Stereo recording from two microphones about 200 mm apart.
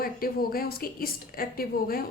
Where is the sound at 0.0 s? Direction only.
45° left (ahead or behind).